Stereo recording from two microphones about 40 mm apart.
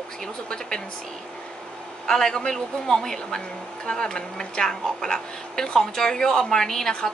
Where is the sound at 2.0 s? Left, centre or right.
Centre.